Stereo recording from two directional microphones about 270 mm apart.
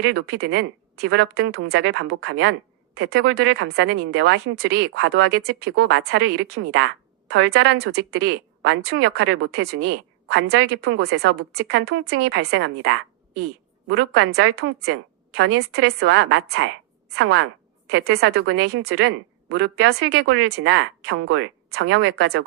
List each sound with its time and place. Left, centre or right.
0.0 s a woman's voice: right
17.8 s speech: right